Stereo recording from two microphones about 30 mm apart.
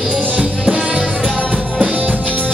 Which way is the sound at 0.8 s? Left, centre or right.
Right.